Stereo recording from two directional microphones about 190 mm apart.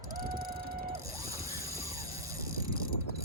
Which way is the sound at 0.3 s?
50° right (ahead or behind).